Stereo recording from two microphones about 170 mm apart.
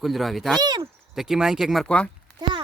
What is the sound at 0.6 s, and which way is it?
Speech, 25° right (ahead or behind).